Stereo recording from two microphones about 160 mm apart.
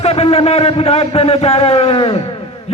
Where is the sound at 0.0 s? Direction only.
40° left (ahead or behind).